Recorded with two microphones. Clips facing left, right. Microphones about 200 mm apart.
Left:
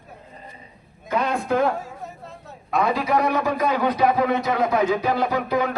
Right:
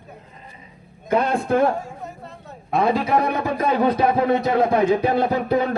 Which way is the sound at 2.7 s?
30° right (ahead or behind).